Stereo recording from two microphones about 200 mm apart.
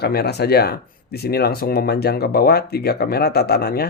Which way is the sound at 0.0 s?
50° left (ahead or behind).